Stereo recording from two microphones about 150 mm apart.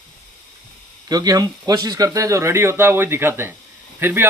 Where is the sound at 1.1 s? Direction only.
25° right (ahead or behind).